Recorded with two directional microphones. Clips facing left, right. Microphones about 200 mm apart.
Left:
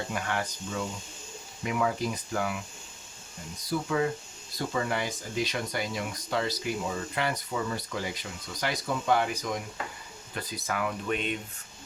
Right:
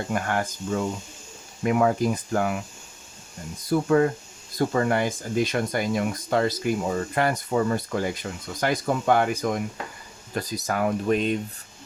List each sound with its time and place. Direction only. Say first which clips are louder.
0.1 s speech: right 6 dB; 50° right (ahead or behind)
3.7 s speech: right 8 dB; 50° right (ahead or behind)
10.3 s speech: right 6 dB; 40° right (ahead or behind)